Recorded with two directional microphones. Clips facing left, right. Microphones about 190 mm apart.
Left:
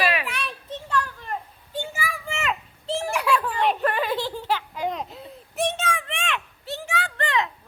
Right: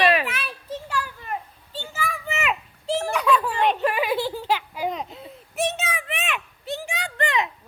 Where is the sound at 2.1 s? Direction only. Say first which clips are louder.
Right 2 dB; 5° right (ahead or behind).